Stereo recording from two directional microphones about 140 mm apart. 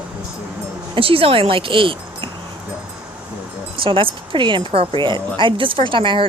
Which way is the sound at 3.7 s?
40° right (ahead or behind).